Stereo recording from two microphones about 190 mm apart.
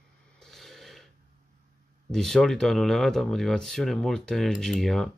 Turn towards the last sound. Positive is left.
turn(degrees=0)  # may be behind; listen again after turning